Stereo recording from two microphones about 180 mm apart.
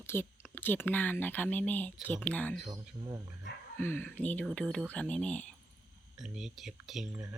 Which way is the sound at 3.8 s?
10° left (ahead or behind).